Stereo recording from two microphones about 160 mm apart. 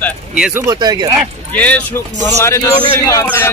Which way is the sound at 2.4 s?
20° left (ahead or behind).